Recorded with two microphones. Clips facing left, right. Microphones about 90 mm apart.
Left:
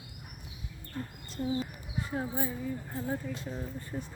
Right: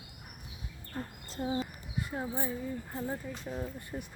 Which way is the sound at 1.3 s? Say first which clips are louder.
Left 1 dB; 40° right (ahead or behind).